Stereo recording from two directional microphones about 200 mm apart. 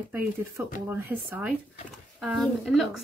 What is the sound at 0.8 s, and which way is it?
A woman's voice, 10° right (ahead or behind).